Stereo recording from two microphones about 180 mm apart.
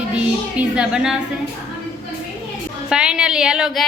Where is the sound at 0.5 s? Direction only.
5° right (ahead or behind).